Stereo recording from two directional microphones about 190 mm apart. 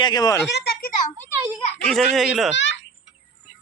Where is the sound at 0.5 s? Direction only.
60° left (ahead or behind).